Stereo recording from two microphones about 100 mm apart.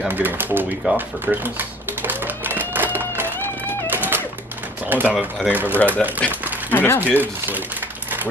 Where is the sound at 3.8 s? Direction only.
20° right (ahead or behind).